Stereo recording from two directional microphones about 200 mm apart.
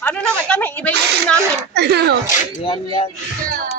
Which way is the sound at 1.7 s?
55° right (ahead or behind).